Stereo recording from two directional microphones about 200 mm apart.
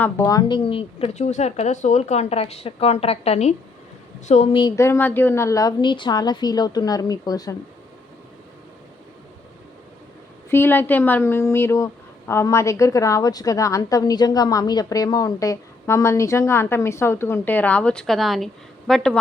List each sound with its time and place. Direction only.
0.0 s speech: 15° left (ahead or behind); by 4.6 s 35° left (ahead or behind)
4.6 s a woman's voice: 15° left (ahead or behind)
10.5 s a woman's voice: 10° left (ahead or behind)